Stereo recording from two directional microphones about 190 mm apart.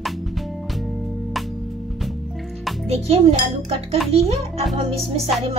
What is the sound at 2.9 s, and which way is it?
A child's voice, 35° right (ahead or behind).